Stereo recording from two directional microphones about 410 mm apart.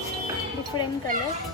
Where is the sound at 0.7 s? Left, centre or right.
Left.